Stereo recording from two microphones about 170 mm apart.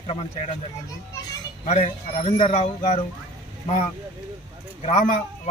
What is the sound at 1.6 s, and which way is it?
Speech, 40° left (ahead or behind).